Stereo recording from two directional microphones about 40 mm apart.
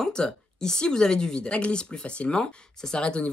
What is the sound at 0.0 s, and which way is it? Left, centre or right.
Speech, centre.